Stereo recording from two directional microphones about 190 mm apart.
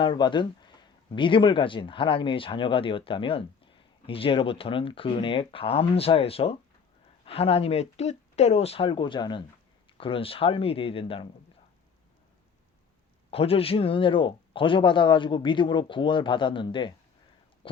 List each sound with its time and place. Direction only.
0.0 s speech: 25° left (ahead or behind)
13.3 s speech: 30° left (ahead or behind)